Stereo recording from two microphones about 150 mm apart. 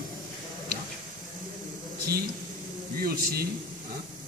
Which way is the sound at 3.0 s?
90° right.